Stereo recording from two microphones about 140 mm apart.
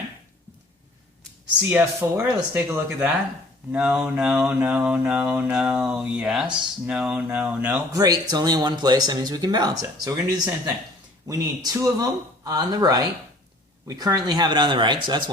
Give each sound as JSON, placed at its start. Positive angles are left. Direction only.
{"t": 1.5, "sound": "mantra", "side_deg": -15}
{"t": 7.9, "sound": "speech", "side_deg": -25}